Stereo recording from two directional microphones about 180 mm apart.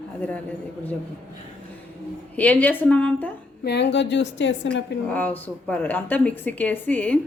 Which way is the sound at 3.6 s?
70° left (ahead or behind).